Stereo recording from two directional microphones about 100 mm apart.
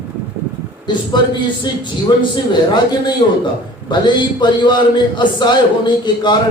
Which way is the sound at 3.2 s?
60° left (ahead or behind).